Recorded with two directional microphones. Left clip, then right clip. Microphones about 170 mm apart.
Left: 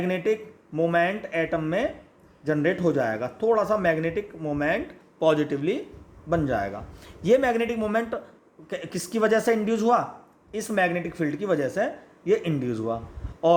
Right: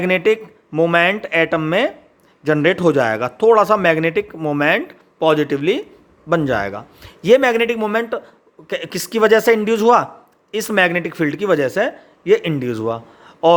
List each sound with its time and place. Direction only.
0.0 s a man's voice: 40° right (ahead or behind)